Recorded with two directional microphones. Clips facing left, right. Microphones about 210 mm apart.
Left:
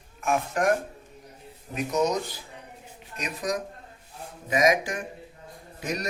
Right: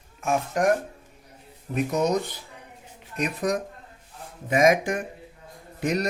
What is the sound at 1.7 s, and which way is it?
Speech, 55° right (ahead or behind).